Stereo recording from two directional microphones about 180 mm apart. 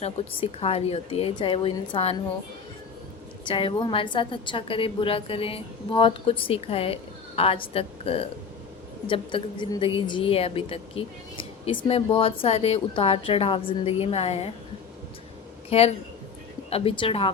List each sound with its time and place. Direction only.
0.0 s a woman's voice: 30° left (ahead or behind)
3.4 s a woman's voice: 30° left (ahead or behind)
15.7 s a woman's voice: 35° left (ahead or behind)